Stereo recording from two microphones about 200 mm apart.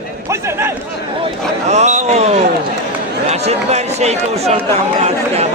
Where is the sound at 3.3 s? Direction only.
35° right (ahead or behind).